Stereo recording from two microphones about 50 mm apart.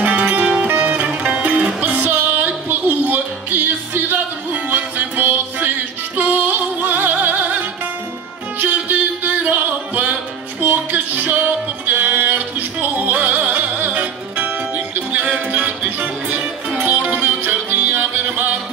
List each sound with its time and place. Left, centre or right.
0.0 s music: right